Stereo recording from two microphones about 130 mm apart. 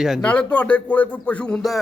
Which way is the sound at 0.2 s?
10° left (ahead or behind).